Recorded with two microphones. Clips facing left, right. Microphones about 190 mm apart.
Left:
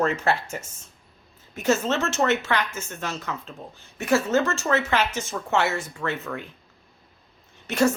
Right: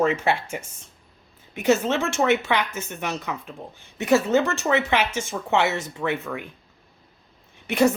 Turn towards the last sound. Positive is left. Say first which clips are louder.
# right 2 dB
turn(degrees=-15)  # may be behind; listen again after turning